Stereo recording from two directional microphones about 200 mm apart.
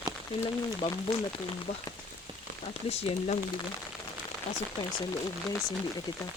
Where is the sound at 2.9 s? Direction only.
30° left (ahead or behind).